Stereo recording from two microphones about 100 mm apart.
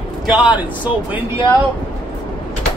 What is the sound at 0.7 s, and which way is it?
Speech, 15° right (ahead or behind).